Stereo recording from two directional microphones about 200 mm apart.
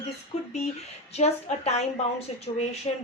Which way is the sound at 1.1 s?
35° left (ahead or behind).